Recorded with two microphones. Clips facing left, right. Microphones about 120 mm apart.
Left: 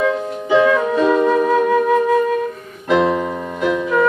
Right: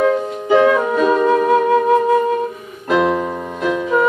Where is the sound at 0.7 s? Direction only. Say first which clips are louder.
Even; 15° right (ahead or behind).